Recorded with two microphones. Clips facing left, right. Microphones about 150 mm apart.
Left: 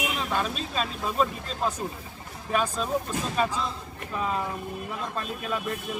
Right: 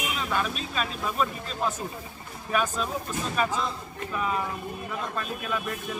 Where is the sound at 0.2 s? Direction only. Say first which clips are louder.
Even; 30° left (ahead or behind).